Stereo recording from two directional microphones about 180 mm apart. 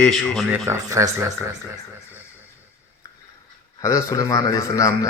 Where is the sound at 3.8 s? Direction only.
15° left (ahead or behind).